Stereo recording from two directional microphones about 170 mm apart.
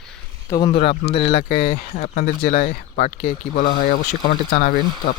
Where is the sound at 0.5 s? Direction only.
30° left (ahead or behind).